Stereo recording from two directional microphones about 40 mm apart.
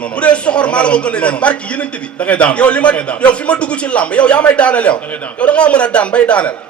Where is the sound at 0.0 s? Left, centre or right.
Left.